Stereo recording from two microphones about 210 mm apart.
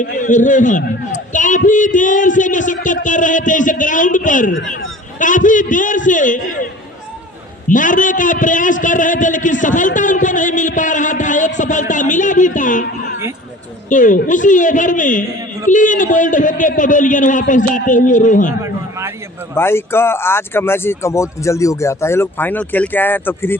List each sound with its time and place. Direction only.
0.0 s a man's voice: 40° left (ahead or behind)
7.7 s a man's voice: 40° left (ahead or behind)
13.9 s a man's voice: 40° left (ahead or behind)
18.6 s a sound: 15° right (ahead or behind)
19.5 s speech: 10° left (ahead or behind)